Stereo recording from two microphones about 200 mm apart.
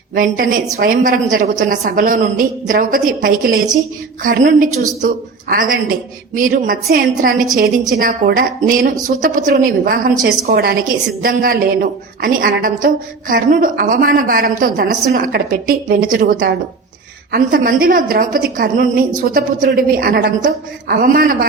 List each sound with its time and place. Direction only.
0.1 s a woman's voice: 45° right (ahead or behind)